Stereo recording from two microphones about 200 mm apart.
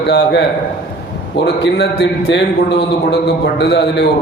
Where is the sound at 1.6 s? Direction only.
60° left (ahead or behind).